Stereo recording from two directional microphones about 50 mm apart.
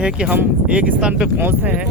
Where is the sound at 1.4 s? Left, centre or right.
Right.